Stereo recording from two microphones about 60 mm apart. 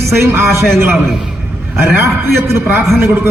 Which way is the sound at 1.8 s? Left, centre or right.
Right.